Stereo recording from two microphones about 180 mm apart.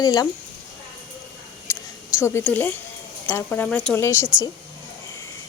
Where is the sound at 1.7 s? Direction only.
15° left (ahead or behind).